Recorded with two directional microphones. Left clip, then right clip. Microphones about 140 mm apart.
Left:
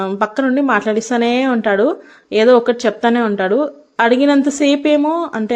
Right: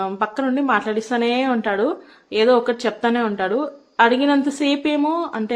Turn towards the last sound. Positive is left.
turn(degrees=25)  # may be behind; listen again after turning